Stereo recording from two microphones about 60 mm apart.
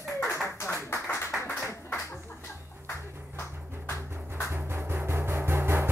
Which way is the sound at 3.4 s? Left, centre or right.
Left.